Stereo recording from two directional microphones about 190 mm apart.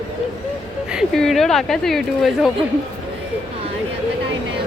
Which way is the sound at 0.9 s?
Centre (ahead or behind).